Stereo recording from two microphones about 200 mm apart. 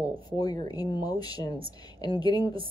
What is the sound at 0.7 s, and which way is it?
Speech, 20° left (ahead or behind).